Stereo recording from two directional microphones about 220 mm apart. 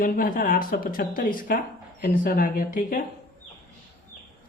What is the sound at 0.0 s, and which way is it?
Speech, 40° left (ahead or behind).